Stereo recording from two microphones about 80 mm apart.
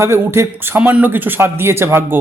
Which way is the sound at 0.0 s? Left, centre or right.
Right.